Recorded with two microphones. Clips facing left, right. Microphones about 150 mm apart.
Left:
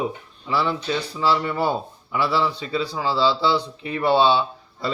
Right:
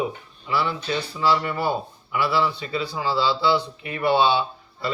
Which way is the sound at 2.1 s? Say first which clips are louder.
Left 1 dB; 35° left (ahead or behind).